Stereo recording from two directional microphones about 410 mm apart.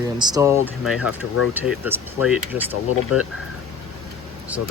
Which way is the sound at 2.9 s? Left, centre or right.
Left.